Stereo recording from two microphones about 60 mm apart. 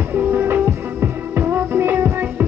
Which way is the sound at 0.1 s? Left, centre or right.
Right.